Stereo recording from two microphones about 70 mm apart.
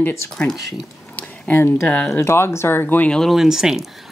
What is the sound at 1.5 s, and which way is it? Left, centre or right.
Speech, left.